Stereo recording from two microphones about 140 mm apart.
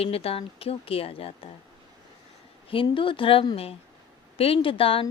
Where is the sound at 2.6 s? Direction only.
40° left (ahead or behind).